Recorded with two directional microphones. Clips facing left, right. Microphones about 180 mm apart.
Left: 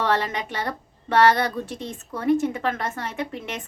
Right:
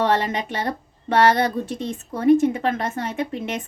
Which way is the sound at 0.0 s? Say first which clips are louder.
Right 3 dB; 20° right (ahead or behind).